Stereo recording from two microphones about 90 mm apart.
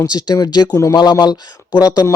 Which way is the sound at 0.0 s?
50° left (ahead or behind).